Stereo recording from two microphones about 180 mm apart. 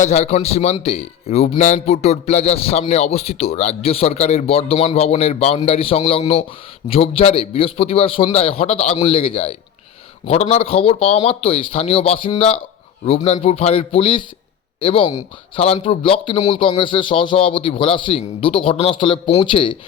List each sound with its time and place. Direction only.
0.0 s speech: 40° left (ahead or behind)